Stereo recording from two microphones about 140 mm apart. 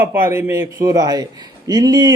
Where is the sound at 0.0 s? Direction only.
15° right (ahead or behind).